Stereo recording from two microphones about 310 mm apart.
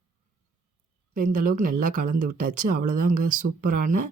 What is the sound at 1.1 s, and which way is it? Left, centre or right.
Speech, right.